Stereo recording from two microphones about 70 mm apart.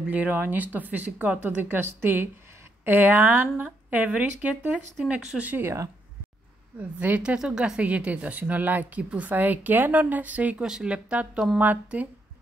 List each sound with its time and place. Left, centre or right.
0.1 s speech: right
4.9 s speech: centre
5.6 s speech: right
7.0 s speech: right
10.6 s speech: centre